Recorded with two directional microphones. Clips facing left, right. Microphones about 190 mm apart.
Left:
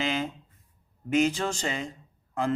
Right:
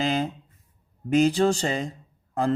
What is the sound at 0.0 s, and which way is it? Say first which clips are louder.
Mantra: right 4 dB; 35° right (ahead or behind).